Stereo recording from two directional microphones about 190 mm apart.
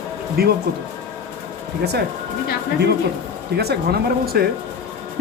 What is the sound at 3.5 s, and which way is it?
Speech, 55° right (ahead or behind).